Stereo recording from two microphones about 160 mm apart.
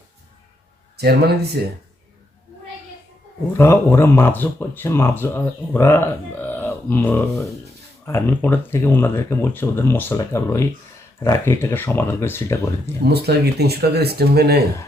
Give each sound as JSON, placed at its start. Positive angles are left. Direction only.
{"t": 0.9, "sound": "speech", "side_deg": -90}
{"t": 3.6, "sound": "speech", "side_deg": 15}
{"t": 13.1, "sound": "speech", "side_deg": -90}